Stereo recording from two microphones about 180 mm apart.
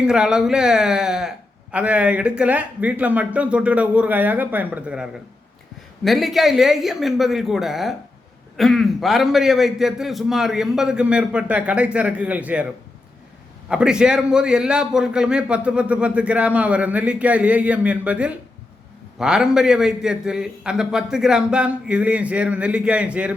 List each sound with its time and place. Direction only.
0.0 s a man's voice: 5° right (ahead or behind)
6.1 s a man's voice: centre (ahead or behind)
13.7 s a man's voice: 5° right (ahead or behind)